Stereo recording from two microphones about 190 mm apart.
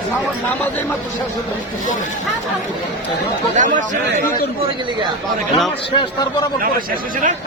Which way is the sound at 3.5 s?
40° right (ahead or behind).